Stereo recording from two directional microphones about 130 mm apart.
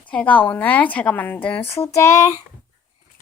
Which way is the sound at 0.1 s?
10° left (ahead or behind).